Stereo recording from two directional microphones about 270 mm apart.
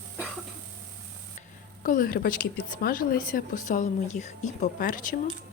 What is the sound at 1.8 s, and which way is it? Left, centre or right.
A woman's voice, left.